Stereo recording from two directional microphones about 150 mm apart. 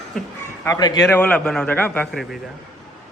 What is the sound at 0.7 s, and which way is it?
Speech, 25° left (ahead or behind).